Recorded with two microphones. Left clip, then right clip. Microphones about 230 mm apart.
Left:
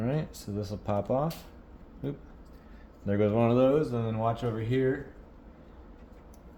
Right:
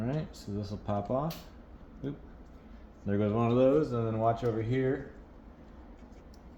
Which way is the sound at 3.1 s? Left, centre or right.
Left.